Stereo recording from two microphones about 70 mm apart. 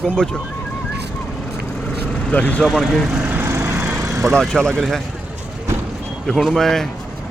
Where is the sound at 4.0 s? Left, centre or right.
Right.